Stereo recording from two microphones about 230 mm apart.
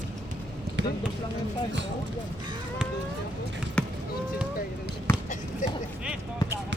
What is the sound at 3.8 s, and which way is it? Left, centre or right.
Basketball bounce, centre.